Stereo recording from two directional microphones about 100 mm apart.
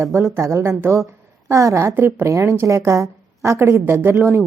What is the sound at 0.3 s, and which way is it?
A woman's voice, 30° right (ahead or behind).